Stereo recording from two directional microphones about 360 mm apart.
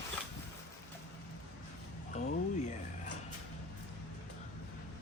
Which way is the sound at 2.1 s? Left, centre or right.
Centre.